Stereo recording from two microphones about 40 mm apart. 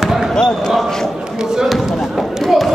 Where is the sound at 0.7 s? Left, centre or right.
Centre.